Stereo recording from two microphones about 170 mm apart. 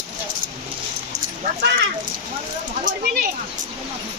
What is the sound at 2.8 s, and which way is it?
Speech, 55° right (ahead or behind).